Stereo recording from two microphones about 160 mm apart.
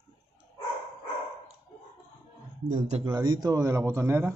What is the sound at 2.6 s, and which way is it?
Speech, 45° right (ahead or behind).